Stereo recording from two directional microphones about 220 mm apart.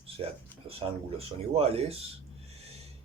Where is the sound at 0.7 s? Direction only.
25° right (ahead or behind).